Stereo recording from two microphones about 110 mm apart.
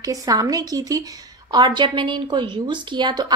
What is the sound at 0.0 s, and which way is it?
A woman's voice, 35° right (ahead or behind).